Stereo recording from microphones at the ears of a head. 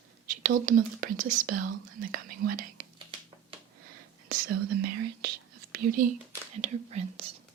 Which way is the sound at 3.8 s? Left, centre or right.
Right.